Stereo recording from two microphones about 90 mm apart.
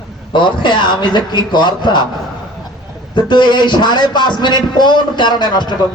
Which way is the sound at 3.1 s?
60° left (ahead or behind).